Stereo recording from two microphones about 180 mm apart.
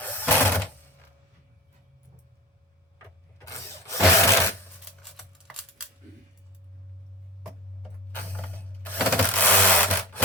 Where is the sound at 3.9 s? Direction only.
15° left (ahead or behind).